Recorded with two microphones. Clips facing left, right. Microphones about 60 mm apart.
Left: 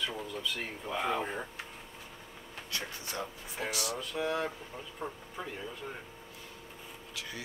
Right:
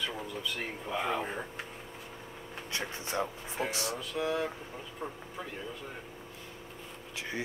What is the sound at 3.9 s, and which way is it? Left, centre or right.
Speech, centre.